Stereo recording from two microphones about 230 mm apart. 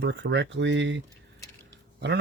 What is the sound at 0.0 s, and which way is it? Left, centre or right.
Speech, right.